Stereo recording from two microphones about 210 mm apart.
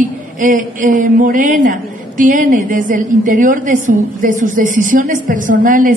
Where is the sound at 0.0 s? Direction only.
40° right (ahead or behind).